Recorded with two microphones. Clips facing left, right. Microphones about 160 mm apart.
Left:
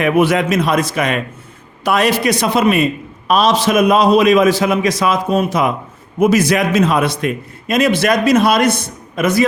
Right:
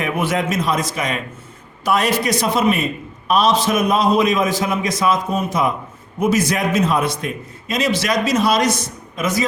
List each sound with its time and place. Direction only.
0.0 s a man's voice: 75° left (ahead or behind)
3.2 s a man's voice: 90° left; by 9.5 s 65° left (ahead or behind)